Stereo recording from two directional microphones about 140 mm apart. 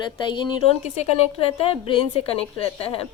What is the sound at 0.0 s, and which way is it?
A woman's voice, 35° left (ahead or behind).